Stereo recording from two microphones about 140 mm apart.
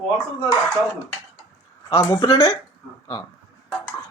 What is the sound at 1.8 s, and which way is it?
Speech, 30° left (ahead or behind).